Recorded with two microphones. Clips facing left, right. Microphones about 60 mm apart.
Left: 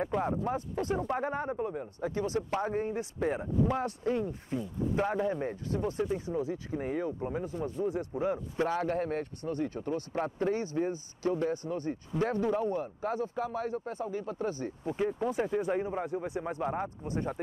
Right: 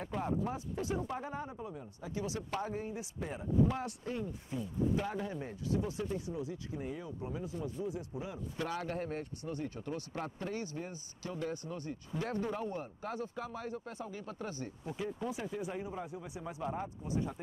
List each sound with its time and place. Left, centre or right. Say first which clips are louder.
0.0 s speech: left 5 dB; left
3.6 s speech: left 5 dB; left
8.5 s speech: left 6 dB; left